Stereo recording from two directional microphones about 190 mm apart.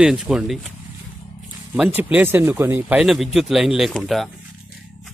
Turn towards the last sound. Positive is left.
turn(degrees=0)  # may be behind; listen again after turning